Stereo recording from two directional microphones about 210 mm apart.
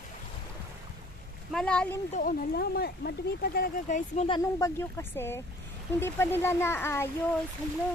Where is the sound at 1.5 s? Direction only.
5° left (ahead or behind).